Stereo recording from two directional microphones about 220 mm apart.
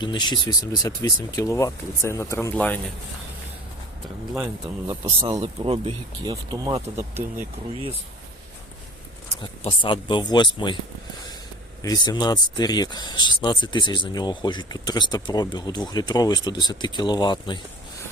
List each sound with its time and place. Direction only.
0.0 s speech: 20° left (ahead or behind)
4.4 s speech: 15° right (ahead or behind)
9.6 s speech: 20° left (ahead or behind)
11.8 s speech: 15° left (ahead or behind)